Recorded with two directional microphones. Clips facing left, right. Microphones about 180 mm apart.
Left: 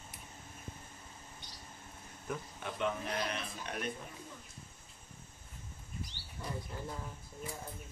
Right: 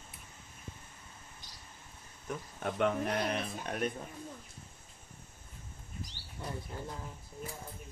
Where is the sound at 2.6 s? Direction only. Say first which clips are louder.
Right 6 dB; 55° right (ahead or behind).